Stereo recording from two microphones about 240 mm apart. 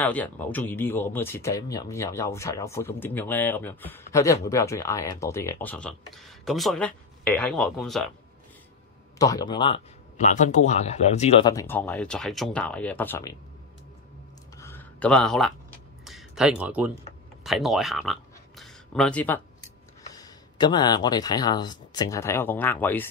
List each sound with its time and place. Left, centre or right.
0.0 s speech: centre
9.2 s speech: centre
14.6 s a sound: centre
17.4 s speech: centre
18.6 s a sound: centre
20.0 s speech: centre